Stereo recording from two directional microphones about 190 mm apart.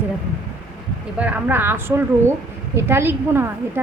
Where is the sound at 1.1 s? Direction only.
10° right (ahead or behind).